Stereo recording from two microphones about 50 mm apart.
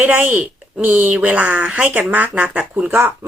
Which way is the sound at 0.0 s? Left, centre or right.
Right.